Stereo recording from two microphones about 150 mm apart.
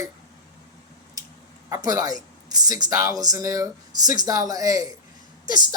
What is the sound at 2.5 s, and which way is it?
Speech, 25° right (ahead or behind).